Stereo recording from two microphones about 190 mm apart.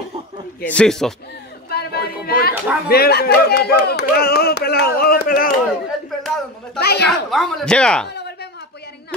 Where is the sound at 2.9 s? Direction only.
55° left (ahead or behind).